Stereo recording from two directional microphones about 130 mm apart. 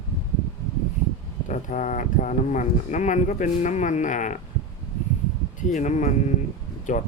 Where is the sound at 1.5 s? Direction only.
85° left.